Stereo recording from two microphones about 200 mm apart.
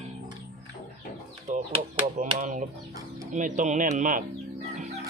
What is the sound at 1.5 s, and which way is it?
Bird, 40° right (ahead or behind).